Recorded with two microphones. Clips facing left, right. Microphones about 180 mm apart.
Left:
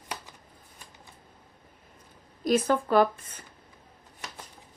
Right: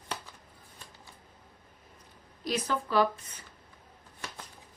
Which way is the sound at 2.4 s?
50° left (ahead or behind).